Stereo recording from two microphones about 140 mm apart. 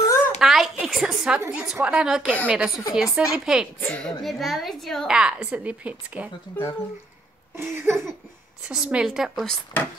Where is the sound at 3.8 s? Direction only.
10° left (ahead or behind).